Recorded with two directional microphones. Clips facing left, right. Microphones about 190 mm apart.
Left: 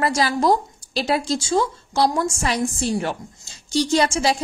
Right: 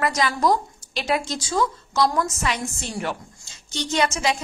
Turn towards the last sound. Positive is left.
turn(degrees=35)  # may be behind; listen again after turning